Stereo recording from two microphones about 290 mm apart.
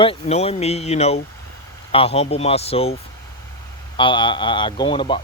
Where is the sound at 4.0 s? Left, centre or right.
Centre.